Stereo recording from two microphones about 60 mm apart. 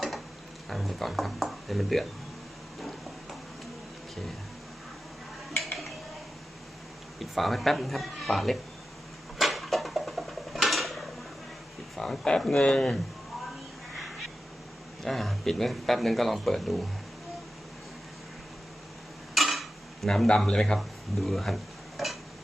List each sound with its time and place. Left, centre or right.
0.7 s speech: centre
7.2 s speech: centre
9.4 s dishes: centre
11.9 s speech: centre
15.0 s speech: centre
19.3 s dishes: centre
20.7 s stir: centre